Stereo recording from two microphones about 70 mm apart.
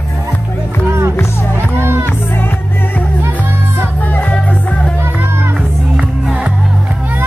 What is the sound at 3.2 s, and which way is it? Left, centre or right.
Music, right.